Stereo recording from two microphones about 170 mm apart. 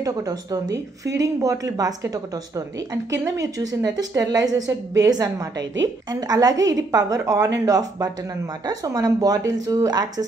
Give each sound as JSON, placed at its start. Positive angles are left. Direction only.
{"t": 0.0, "sound": "a woman's voice", "side_deg": -20}